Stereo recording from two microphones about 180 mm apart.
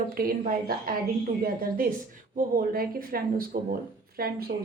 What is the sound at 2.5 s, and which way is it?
A woman's voice, 55° right (ahead or behind).